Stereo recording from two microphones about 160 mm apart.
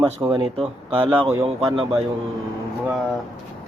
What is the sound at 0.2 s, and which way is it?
Speech, 25° right (ahead or behind).